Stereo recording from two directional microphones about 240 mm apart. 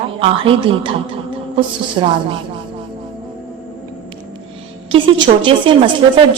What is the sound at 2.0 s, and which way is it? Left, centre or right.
Speech, centre.